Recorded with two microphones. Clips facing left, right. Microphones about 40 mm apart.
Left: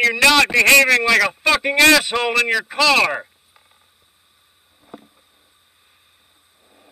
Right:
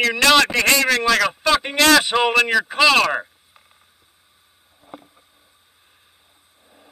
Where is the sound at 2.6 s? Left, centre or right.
Centre.